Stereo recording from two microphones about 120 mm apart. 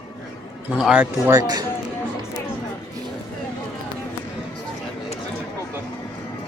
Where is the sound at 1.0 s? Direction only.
25° right (ahead or behind).